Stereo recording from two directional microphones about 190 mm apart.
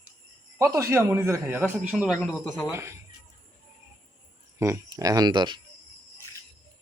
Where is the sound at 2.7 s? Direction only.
15° right (ahead or behind).